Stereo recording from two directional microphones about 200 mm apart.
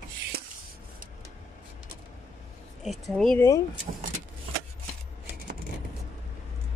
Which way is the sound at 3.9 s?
40° right (ahead or behind).